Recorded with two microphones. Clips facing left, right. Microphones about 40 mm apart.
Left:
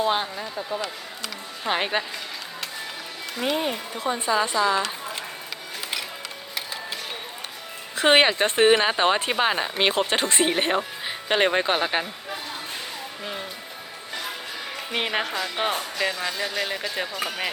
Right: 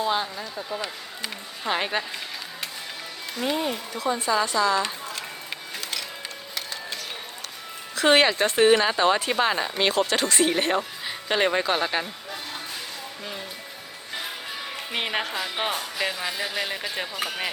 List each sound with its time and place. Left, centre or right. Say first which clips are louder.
0.0 s speech: left 2 dB; left
1.6 s speech: left 1 dB; centre
3.5 s speech: left 1 dB; centre
3.9 s a woman's voice: right 2 dB; left
4.3 s speech: left 1 dB; centre
7.9 s speech: left 1 dB; left
9.3 s speech: even; centre
14.1 s music: left 1 dB; centre
14.9 s speech: left 2 dB; centre